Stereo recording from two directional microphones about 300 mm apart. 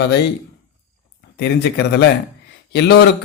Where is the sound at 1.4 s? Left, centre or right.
Left.